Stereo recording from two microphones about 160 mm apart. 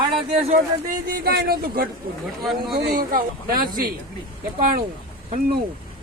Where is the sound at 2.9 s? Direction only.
65° right (ahead or behind).